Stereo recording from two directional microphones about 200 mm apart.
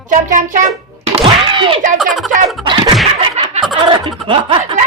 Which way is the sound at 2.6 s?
25° right (ahead or behind).